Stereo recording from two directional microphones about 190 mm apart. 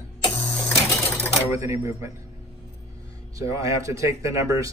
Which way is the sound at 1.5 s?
15° right (ahead or behind).